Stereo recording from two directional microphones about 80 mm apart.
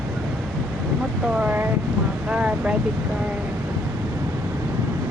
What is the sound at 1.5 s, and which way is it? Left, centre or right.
Speech, right.